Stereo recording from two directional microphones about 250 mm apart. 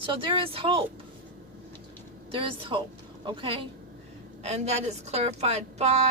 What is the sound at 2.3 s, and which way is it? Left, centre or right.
A woman's voice, right.